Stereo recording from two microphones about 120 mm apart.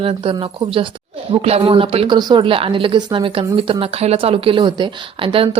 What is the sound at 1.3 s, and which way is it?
Speech, 60° right (ahead or behind).